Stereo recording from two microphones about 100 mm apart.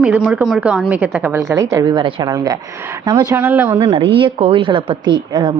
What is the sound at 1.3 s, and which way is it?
Speech, 30° right (ahead or behind).